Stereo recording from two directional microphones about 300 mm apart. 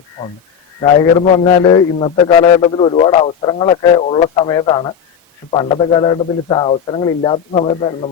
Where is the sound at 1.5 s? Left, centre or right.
Centre.